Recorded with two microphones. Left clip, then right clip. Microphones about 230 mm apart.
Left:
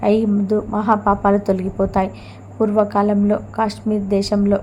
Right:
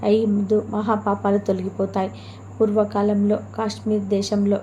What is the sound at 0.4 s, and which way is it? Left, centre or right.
A woman's voice, centre.